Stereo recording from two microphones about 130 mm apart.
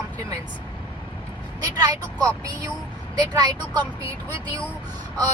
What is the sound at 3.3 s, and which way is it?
Speech, 30° right (ahead or behind).